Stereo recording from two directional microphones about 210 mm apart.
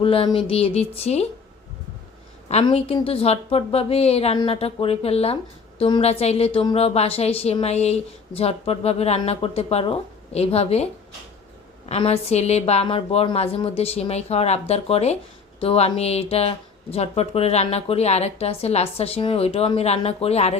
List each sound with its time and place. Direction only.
0.0 s a woman's voice: 25° left (ahead or behind)
2.5 s a woman's voice: 30° left (ahead or behind)
11.9 s a woman's voice: 30° left (ahead or behind)